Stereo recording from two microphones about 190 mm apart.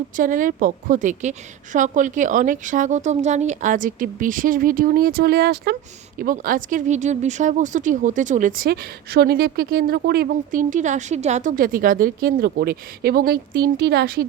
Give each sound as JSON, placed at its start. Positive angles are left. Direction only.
{"t": 0.2, "sound": "speech", "side_deg": -45}